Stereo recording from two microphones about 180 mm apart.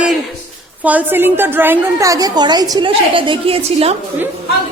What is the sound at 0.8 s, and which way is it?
A woman's voice, 10° right (ahead or behind).